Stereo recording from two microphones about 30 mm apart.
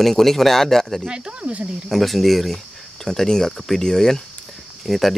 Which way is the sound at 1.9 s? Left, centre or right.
Centre.